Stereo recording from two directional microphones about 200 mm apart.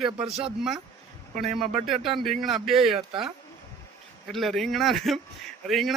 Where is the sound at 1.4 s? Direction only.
Centre (ahead or behind).